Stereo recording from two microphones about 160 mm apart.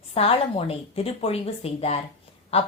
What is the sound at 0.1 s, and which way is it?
Speech, 35° left (ahead or behind).